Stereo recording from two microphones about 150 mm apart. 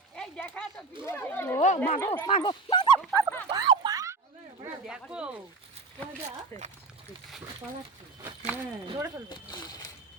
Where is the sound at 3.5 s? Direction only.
30° right (ahead or behind).